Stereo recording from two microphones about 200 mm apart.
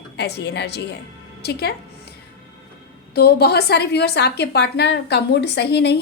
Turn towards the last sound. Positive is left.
turn(degrees=55)  # may be behind; listen again after turning